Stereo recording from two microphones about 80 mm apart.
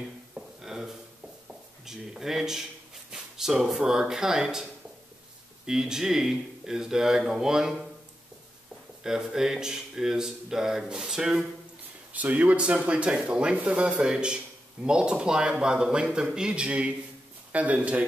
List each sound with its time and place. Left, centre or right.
0.0 s a sound: centre
1.5 s speech: centre
5.7 s speech: centre
9.0 s speech: centre
12.1 s speech: centre